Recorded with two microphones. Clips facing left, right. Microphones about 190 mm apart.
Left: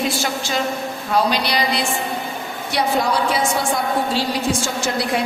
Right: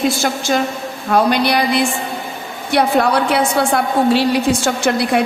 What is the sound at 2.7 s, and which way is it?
A woman's voice, 60° right (ahead or behind).